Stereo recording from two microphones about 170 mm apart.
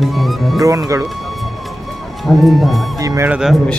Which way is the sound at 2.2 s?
Centre (ahead or behind).